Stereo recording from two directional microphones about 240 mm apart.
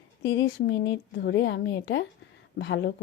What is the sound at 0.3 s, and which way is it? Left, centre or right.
A woman's voice, left.